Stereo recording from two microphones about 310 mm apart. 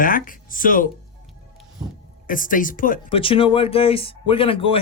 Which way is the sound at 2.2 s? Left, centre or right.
Left.